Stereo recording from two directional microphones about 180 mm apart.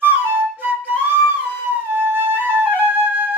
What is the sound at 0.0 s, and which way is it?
Flute, 10° right (ahead or behind).